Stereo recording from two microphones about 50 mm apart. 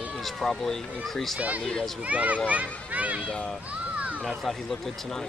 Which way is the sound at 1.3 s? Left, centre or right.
Right.